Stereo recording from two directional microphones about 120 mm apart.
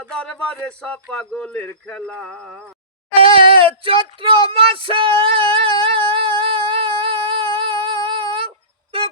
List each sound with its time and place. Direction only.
0.0 s speech: 10° left (ahead or behind)
3.2 s speech: 50° right (ahead or behind)
5.8 s music: 45° right (ahead or behind)